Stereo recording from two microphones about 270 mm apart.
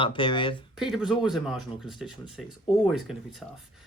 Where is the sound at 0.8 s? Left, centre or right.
Centre.